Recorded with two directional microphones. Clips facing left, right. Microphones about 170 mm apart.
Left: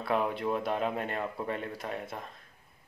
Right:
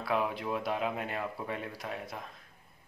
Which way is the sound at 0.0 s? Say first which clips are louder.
Left 2 dB; centre (ahead or behind).